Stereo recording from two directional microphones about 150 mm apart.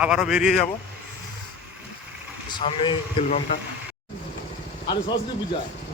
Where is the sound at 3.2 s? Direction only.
50° left (ahead or behind).